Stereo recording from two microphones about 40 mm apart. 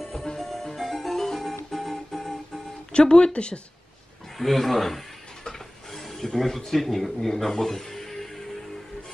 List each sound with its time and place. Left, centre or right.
0.1 s music: centre
2.9 s speech: left
4.4 s a man's voice: centre
7.5 s music: centre